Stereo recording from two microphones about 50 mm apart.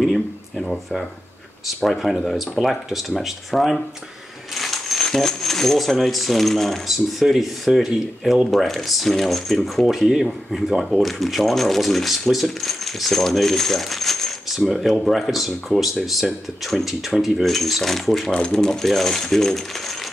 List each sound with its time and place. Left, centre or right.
0.0 s a sound: centre
1.8 s speech: centre
4.6 s a sound: centre
5.0 s speech: centre
14.5 s speech: centre
18.3 s speech: centre